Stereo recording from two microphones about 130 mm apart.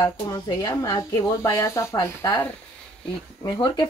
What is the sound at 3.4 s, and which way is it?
Speech, 30° left (ahead or behind).